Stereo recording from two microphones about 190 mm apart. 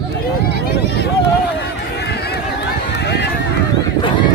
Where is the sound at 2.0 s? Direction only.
60° left (ahead or behind).